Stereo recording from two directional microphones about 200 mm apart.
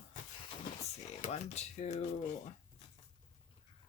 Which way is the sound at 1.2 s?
35° left (ahead or behind).